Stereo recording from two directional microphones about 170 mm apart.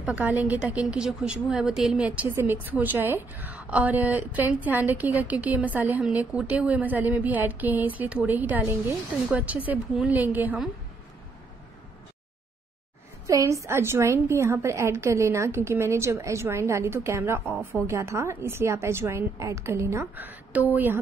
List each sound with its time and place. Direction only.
0.0 s a woman's voice: 10° right (ahead or behind)
13.3 s a woman's voice: 20° right (ahead or behind)